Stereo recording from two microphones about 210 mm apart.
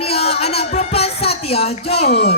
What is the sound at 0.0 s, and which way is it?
Music, 30° left (ahead or behind).